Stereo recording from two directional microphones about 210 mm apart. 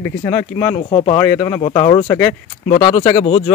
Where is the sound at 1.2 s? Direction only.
15° left (ahead or behind).